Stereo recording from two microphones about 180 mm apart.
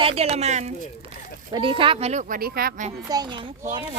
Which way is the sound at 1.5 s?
30° right (ahead or behind).